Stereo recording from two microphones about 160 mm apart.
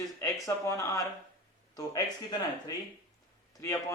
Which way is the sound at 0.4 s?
20° left (ahead or behind).